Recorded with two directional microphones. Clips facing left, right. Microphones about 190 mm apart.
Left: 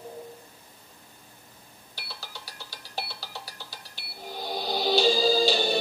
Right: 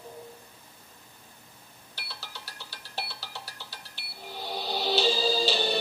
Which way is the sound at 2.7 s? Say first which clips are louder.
Left 2 dB; 40° left (ahead or behind).